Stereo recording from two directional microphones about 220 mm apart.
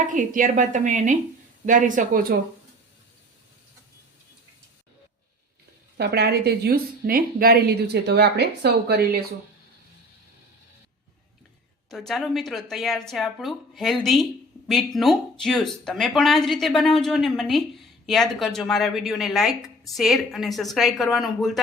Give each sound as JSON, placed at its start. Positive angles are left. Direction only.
{"t": 0.1, "sound": "a woman's voice", "side_deg": -35}
{"t": 6.0, "sound": "a woman's voice", "side_deg": -45}
{"t": 11.9, "sound": "speech", "side_deg": 0}